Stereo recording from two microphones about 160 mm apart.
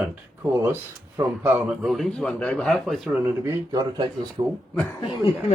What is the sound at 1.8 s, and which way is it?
Speech, centre (ahead or behind).